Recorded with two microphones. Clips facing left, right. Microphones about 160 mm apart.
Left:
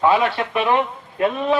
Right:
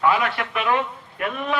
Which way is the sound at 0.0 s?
25° left (ahead or behind).